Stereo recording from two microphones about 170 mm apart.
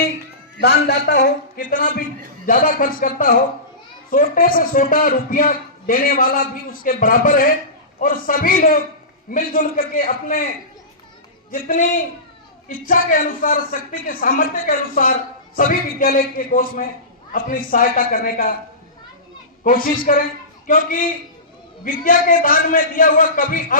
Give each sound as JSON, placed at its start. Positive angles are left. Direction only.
{"t": 0.6, "sound": "a man's voice", "side_deg": 70}
{"t": 1.2, "sound": "a man's voice", "side_deg": 50}
{"t": 11.5, "sound": "a man's voice", "side_deg": 55}
{"t": 19.6, "sound": "a man's voice", "side_deg": 55}